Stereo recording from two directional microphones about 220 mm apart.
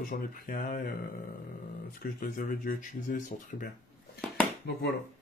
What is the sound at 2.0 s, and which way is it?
Speech, 40° left (ahead or behind).